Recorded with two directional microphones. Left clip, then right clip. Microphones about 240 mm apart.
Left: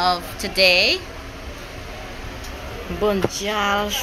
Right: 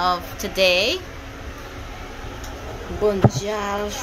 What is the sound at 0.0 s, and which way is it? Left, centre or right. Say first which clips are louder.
Speech: left 1 dB; right.